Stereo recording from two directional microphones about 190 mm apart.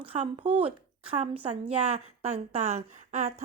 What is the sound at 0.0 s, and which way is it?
A woman's voice, 30° right (ahead or behind).